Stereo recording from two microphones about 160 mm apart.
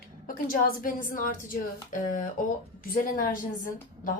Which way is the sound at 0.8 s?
60° left (ahead or behind).